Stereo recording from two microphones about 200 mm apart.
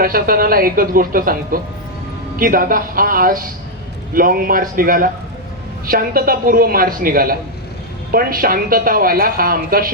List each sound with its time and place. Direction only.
0.0 s a woman's voice: 45° right (ahead or behind)